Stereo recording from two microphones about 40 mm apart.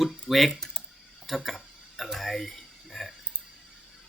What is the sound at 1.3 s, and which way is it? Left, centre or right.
Tick-tock, centre.